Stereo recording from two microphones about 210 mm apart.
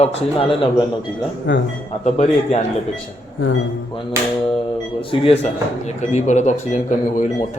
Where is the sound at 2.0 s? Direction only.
30° left (ahead or behind).